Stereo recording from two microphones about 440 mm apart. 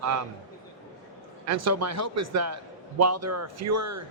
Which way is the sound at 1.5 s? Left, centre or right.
Right.